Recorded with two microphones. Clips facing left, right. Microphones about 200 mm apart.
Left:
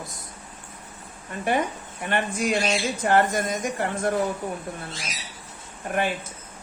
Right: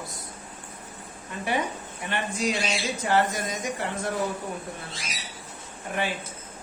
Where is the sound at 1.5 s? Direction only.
50° left (ahead or behind).